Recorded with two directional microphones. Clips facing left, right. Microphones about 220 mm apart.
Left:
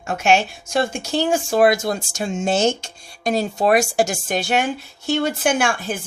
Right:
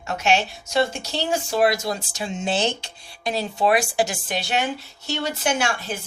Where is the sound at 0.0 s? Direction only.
50° left (ahead or behind).